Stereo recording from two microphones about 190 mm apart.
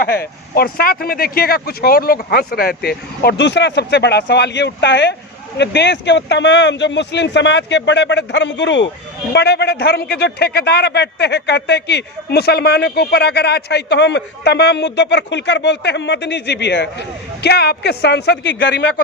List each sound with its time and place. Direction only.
0.0 s a man's voice: 55° left (ahead or behind); by 8.9 s 70° left (ahead or behind)
9.3 s a man's voice: 60° left (ahead or behind)